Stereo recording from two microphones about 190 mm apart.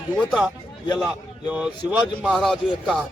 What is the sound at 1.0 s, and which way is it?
A man's voice, 5° right (ahead or behind).